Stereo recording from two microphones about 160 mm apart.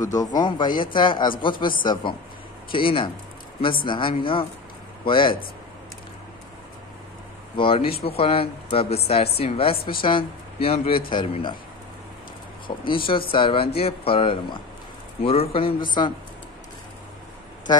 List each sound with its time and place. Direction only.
0.0 s speech: 20° left (ahead or behind)
7.5 s speech: 35° left (ahead or behind)
12.6 s speech: 30° left (ahead or behind)
17.7 s speech: 25° left (ahead or behind)